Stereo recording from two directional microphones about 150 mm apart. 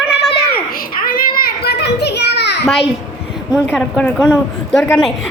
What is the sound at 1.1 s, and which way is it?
Child singing, 80° left.